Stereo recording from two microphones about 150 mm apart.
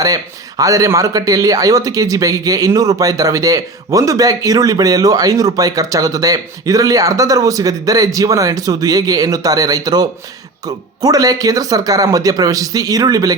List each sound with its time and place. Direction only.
0.0 s speech: 25° right (ahead or behind)